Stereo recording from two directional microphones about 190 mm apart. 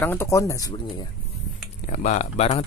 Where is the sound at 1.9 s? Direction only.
40° left (ahead or behind).